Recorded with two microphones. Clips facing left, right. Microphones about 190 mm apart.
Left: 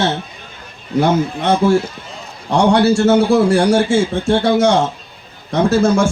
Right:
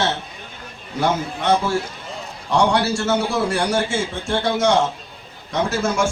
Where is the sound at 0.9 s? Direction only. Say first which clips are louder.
Left 7 dB; 55° left (ahead or behind).